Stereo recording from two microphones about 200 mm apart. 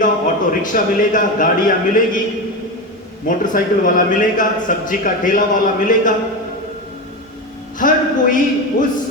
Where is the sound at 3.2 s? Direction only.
40° left (ahead or behind).